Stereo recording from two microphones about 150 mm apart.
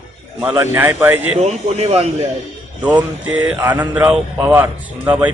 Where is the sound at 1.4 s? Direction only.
45° right (ahead or behind).